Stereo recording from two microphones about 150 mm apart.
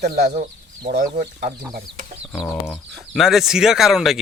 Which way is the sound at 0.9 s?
75° right (ahead or behind).